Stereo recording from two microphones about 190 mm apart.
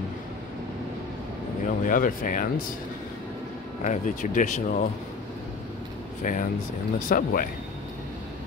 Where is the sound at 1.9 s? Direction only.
45° left (ahead or behind).